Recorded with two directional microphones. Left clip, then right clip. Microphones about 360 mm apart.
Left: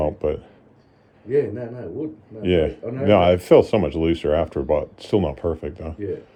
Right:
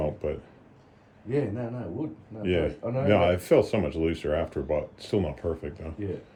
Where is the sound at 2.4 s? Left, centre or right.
Left.